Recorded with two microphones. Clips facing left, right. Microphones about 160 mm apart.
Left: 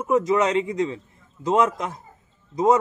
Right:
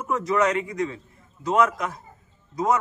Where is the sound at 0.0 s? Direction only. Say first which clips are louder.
Left 3 dB; 20° left (ahead or behind).